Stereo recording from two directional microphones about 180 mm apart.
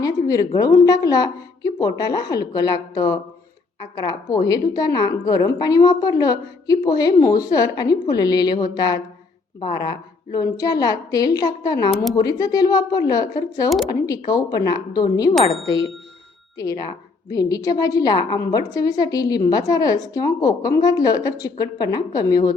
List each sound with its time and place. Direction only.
0.0 s a woman's voice: 20° left (ahead or behind)